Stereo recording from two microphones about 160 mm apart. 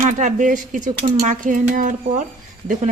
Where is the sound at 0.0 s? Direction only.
50° right (ahead or behind).